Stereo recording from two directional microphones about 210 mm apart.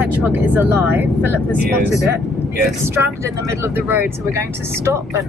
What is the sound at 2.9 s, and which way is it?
Speech, 15° right (ahead or behind).